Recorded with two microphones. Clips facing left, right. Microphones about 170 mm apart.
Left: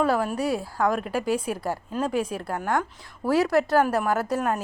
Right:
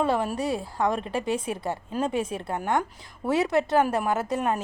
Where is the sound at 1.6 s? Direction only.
25° right (ahead or behind).